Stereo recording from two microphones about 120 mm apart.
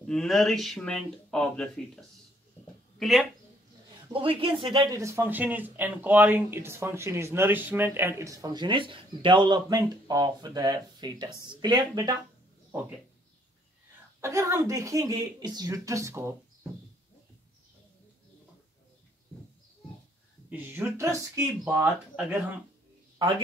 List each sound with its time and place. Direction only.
0.0 s speech: 5° left (ahead or behind)
4.1 s a man's voice: 50° right (ahead or behind)
4.7 s speech: 25° right (ahead or behind)
14.2 s speech: 25° right (ahead or behind)
20.4 s speech: 15° right (ahead or behind)